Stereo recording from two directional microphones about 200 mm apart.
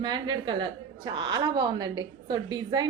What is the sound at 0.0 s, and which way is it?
A woman's voice, 20° right (ahead or behind).